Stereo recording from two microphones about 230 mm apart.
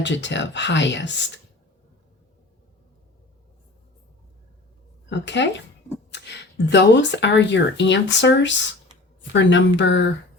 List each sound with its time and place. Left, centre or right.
0.0 s speech: left
5.0 s speech: left